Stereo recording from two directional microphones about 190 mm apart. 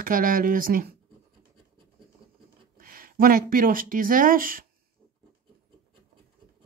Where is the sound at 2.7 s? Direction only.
50° right (ahead or behind).